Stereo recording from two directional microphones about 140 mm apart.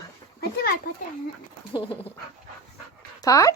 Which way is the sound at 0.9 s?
90° left.